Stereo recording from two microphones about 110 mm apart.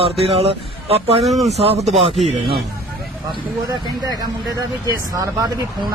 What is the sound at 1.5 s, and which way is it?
Speech, 70° right (ahead or behind).